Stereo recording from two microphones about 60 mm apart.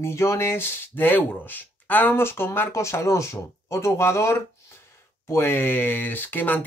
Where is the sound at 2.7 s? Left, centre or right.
Left.